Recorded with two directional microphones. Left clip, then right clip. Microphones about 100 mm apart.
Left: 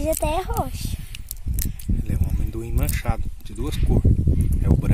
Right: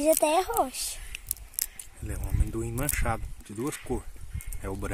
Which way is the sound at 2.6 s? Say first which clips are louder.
Left 1 dB; 40° left (ahead or behind).